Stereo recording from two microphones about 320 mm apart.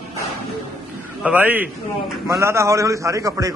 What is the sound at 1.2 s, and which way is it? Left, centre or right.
A man's voice, centre.